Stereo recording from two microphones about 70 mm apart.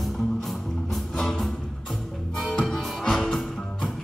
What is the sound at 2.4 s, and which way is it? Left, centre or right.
Music, centre.